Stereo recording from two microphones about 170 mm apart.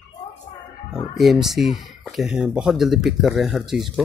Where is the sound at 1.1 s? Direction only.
Centre (ahead or behind).